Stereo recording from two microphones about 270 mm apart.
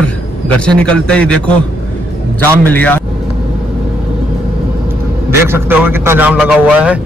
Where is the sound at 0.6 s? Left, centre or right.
Centre.